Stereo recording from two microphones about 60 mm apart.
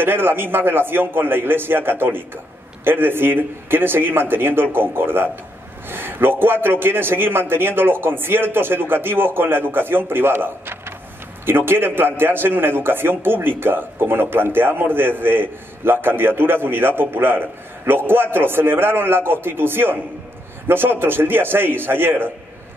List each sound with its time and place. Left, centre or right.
0.0 s a man's voice: right